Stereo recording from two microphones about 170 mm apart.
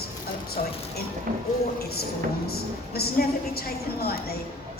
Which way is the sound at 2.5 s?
65° left (ahead or behind).